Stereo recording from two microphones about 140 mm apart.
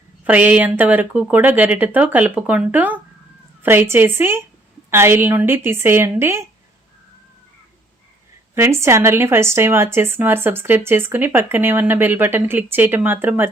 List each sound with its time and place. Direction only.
0.3 s a woman's voice: 10° right (ahead or behind)
8.5 s a woman's voice: 20° right (ahead or behind)